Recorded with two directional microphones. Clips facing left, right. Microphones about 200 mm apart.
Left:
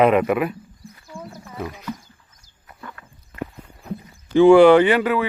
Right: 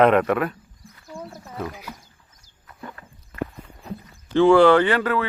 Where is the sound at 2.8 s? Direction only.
25° right (ahead or behind).